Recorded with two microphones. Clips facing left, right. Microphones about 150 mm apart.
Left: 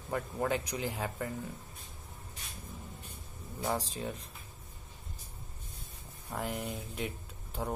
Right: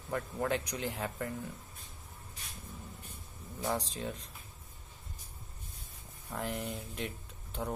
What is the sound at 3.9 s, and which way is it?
Speech, 5° left (ahead or behind).